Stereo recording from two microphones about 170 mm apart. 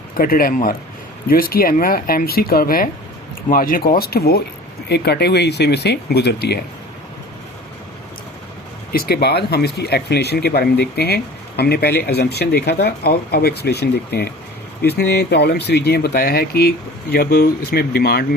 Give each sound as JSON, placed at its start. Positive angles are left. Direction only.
{"t": 0.2, "sound": "speech", "side_deg": 60}
{"t": 8.9, "sound": "speech", "side_deg": 65}